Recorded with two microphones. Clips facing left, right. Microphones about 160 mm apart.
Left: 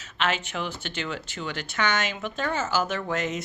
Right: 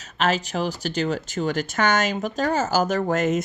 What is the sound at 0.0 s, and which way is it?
Speech, 40° right (ahead or behind).